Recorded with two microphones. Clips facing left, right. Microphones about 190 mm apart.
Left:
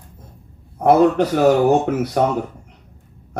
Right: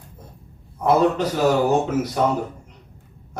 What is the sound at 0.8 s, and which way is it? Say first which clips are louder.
Speech: left 4 dB; 60° left (ahead or behind).